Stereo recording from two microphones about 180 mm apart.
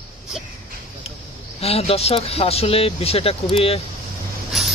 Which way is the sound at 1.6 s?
35° left (ahead or behind).